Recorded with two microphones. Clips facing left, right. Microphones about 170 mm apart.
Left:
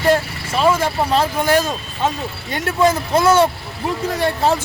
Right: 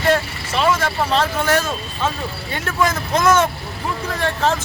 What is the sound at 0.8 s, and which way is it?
Speech, 10° left (ahead or behind).